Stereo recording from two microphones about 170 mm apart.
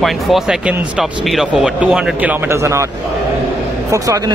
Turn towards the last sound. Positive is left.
turn(degrees=-20)  # may be behind; listen again after turning